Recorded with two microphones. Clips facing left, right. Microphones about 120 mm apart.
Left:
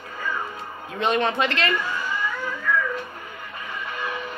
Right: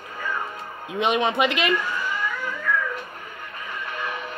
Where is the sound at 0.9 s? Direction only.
15° right (ahead or behind).